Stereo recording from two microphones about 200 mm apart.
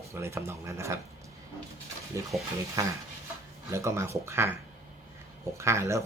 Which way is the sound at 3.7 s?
15° right (ahead or behind).